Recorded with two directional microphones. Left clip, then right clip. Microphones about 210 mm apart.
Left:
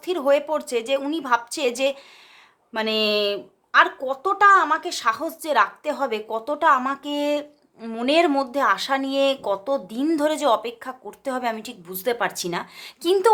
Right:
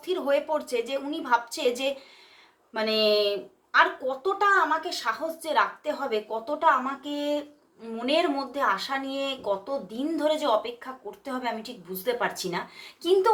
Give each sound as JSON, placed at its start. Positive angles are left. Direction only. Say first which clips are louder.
{"t": 0.0, "sound": "speech", "louder": "left 5 dB", "side_deg": 45}